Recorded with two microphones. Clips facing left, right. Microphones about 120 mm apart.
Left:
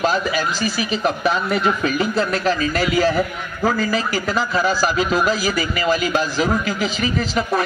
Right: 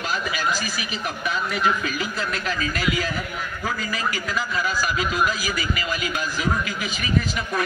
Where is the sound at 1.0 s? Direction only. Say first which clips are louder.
Left 8 dB; 90° left.